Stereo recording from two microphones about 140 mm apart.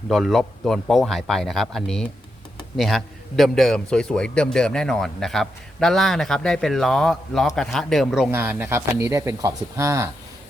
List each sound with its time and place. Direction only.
0.1 s a man's voice: centre (ahead or behind)
8.3 s speech: 15° right (ahead or behind)